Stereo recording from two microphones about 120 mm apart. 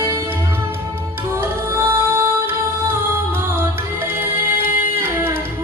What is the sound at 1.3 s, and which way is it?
Music, 20° right (ahead or behind).